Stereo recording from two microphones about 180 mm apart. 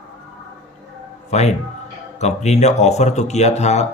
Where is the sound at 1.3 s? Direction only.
40° left (ahead or behind).